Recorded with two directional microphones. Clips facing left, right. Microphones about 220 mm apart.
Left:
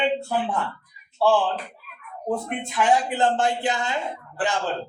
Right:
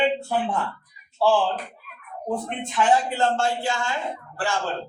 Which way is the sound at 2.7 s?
15° left (ahead or behind).